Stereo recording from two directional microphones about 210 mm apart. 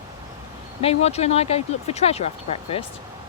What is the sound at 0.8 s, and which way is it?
Speech, 30° left (ahead or behind).